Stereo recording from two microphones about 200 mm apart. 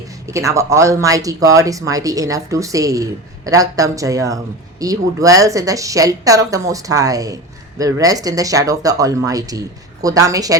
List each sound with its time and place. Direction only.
0.3 s speech: 15° right (ahead or behind)